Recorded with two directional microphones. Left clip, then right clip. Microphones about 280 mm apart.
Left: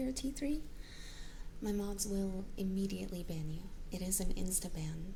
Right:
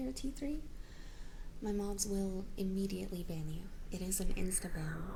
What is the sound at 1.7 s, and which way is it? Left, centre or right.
Speech, centre.